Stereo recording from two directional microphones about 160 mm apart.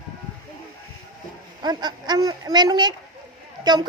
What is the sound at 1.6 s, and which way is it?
A woman's voice, 25° right (ahead or behind).